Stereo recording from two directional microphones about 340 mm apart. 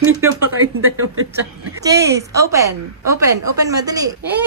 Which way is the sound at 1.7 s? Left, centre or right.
Centre.